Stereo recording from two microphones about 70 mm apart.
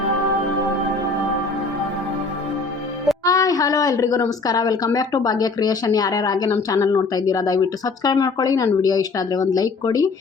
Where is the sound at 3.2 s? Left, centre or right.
Left.